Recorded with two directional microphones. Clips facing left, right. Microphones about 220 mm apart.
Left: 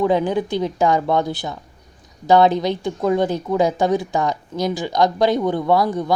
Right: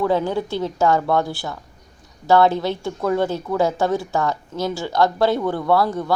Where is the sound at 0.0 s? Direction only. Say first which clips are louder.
Left 2 dB; 15° left (ahead or behind).